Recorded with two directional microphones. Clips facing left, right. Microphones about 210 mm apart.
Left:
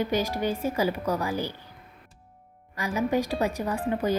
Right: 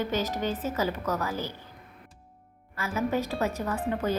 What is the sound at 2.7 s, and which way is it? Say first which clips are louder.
Speech: left 3 dB; 15° left (ahead or behind).